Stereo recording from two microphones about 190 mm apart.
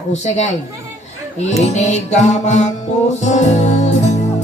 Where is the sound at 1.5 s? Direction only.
35° left (ahead or behind).